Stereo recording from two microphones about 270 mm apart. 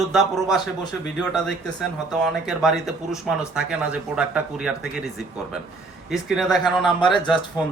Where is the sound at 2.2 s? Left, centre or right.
Centre.